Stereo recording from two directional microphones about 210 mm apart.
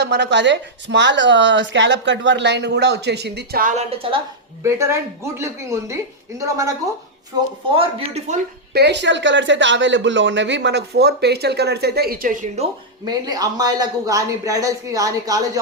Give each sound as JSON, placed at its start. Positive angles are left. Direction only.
{"t": 0.0, "sound": "a woman's voice", "side_deg": -55}
{"t": 4.6, "sound": "a man's voice", "side_deg": -15}
{"t": 7.8, "sound": "speech", "side_deg": -30}
{"t": 8.7, "sound": "speech", "side_deg": -55}
{"t": 13.1, "sound": "a man's voice", "side_deg": -20}